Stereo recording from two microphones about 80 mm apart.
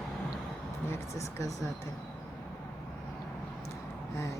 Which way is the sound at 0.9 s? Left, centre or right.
Left.